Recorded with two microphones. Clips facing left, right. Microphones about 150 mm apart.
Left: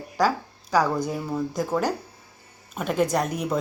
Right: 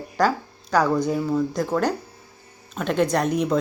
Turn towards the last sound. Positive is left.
turn(degrees=5)  # may be behind; listen again after turning